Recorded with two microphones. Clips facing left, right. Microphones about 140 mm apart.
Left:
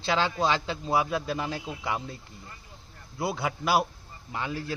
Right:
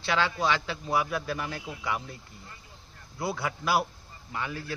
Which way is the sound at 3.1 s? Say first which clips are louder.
Left 2 dB; 20° left (ahead or behind).